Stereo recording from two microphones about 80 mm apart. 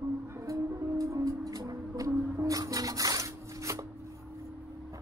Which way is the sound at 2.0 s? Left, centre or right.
Right.